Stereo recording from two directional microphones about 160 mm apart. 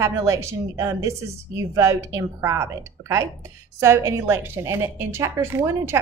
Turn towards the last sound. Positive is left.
turn(degrees=-15)  # may be behind; listen again after turning